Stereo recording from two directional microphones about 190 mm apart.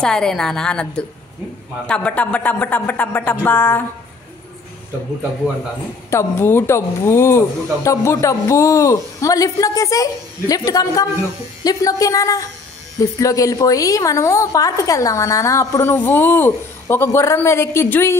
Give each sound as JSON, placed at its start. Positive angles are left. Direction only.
{"t": 0.0, "sound": "a woman's voice", "side_deg": 5}
{"t": 6.0, "sound": "a woman's voice", "side_deg": 15}